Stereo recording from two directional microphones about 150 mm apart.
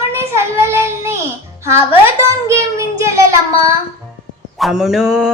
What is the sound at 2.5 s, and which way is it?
Child singing, 20° right (ahead or behind).